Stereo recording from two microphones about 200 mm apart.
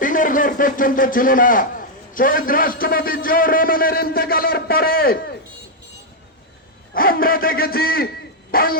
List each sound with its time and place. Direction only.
0.0 s a man's voice: 40° left (ahead or behind)
6.9 s a man's voice: 45° left (ahead or behind)